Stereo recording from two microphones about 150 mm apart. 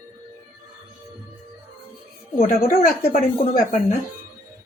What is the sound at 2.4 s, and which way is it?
Speech, 80° left.